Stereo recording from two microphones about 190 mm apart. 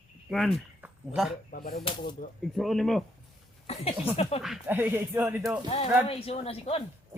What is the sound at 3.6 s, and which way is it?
Speech, 30° left (ahead or behind).